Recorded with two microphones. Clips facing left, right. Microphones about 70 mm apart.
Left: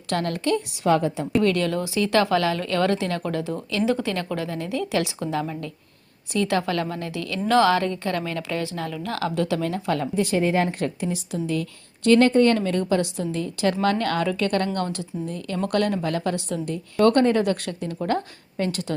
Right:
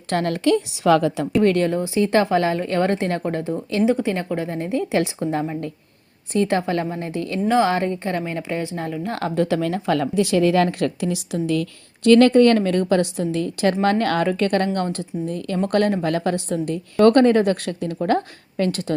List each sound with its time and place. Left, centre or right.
0.1 s speech: right
1.5 s a woman's voice: right
3.8 s a woman's voice: right
6.6 s a woman's voice: right
7.4 s a woman's voice: centre
9.1 s speech: right
11.4 s a woman's voice: right